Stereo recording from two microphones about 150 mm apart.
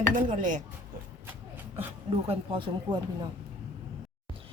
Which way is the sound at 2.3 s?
35° right (ahead or behind).